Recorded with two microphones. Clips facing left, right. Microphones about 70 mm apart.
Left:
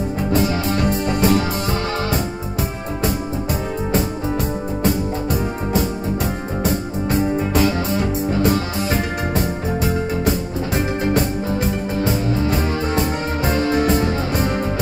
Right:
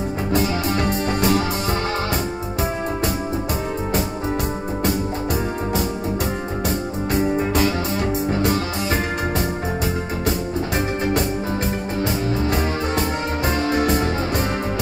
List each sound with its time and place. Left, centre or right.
1.0 s music: right
13.9 s music: right